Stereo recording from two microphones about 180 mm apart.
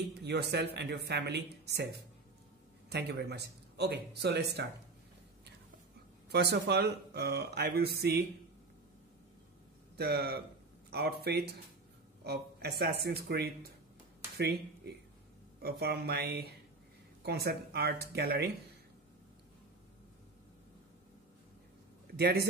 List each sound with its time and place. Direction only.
0.2 s speech: 65° right (ahead or behind)
6.3 s speech: 65° right (ahead or behind)
9.9 s speech: 60° right (ahead or behind)
22.1 s speech: 65° right (ahead or behind)